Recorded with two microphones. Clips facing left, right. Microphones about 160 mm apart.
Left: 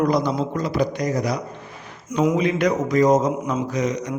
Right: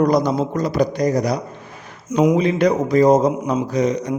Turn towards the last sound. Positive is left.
turn(degrees=-30)  # may be behind; listen again after turning